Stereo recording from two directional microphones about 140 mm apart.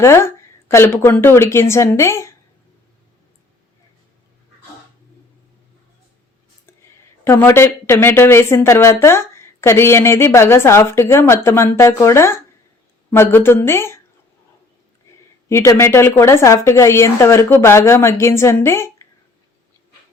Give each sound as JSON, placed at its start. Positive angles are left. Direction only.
{"t": 0.0, "sound": "a woman's voice", "side_deg": 20}
{"t": 7.3, "sound": "a woman's voice", "side_deg": 15}
{"t": 15.4, "sound": "a woman's voice", "side_deg": 20}